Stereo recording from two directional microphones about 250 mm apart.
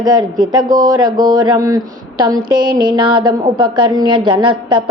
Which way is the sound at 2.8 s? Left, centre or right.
Centre.